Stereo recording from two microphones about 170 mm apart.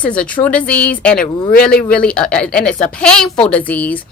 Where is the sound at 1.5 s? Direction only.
60° left (ahead or behind).